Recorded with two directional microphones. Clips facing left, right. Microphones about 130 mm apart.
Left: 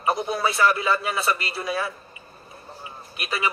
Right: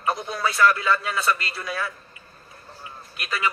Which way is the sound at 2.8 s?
20° left (ahead or behind).